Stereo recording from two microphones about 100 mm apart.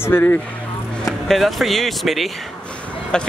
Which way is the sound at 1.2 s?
Centre (ahead or behind).